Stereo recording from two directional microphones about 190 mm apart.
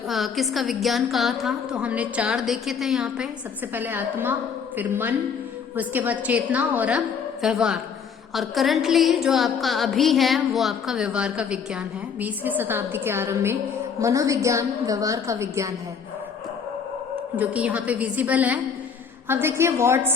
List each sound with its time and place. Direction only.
0.1 s music: centre (ahead or behind)
3.8 s a woman's voice: 10° right (ahead or behind)
7.4 s music: 5° right (ahead or behind)
12.2 s a woman's voice: 10° right (ahead or behind)
17.3 s a woman's voice: 10° right (ahead or behind)